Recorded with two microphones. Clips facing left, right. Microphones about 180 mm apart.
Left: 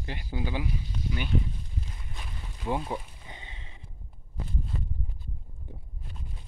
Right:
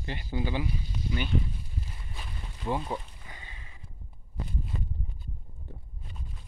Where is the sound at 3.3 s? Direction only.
20° left (ahead or behind).